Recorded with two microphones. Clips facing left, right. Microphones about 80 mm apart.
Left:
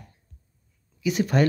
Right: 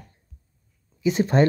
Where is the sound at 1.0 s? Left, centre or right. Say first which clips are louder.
Right 3 dB; right.